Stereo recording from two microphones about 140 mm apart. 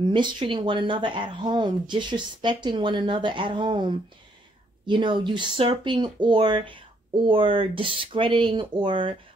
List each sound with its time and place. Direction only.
0.0 s speech: 35° right (ahead or behind)